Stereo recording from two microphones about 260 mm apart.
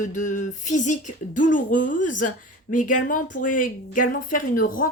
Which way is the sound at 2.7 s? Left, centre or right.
Left.